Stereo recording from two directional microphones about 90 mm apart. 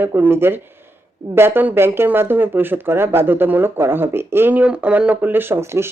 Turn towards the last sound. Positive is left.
turn(degrees=-30)  # may be behind; listen again after turning